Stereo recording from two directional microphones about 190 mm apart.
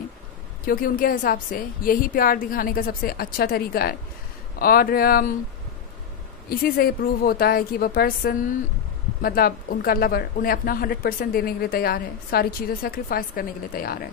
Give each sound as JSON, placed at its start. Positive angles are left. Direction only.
{"t": 0.7, "sound": "speech", "side_deg": 50}
{"t": 6.5, "sound": "speech", "side_deg": 50}